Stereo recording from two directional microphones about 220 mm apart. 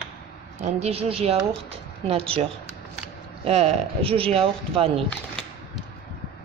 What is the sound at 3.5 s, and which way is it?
A woman's voice, 30° right (ahead or behind).